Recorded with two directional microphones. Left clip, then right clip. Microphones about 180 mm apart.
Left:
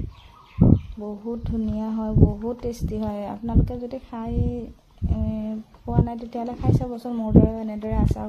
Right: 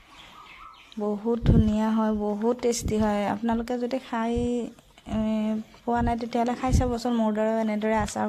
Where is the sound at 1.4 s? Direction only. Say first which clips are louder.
Right 4 dB; 15° right (ahead or behind).